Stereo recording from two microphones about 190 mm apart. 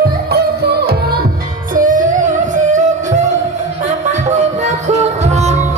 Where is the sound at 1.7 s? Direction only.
45° right (ahead or behind).